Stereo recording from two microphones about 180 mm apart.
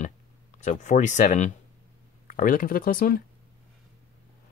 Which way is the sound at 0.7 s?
40° left (ahead or behind).